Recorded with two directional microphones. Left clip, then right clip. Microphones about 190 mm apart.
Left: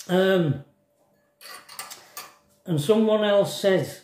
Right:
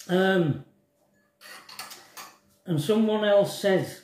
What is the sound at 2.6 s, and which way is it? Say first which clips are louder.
Speech: left 4 dB; 25° left (ahead or behind).